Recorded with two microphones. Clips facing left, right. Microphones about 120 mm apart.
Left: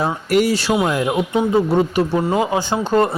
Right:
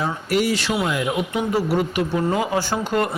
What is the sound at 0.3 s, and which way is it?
Speech, 45° left (ahead or behind).